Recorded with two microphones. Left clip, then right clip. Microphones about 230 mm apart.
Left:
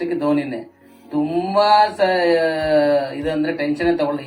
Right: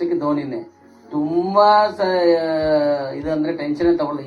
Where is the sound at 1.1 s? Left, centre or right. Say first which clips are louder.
Right 1 dB; left.